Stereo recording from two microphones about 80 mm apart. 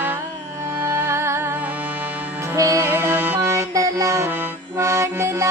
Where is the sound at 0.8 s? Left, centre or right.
Right.